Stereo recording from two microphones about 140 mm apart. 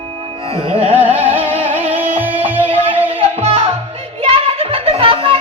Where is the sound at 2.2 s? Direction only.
10° right (ahead or behind).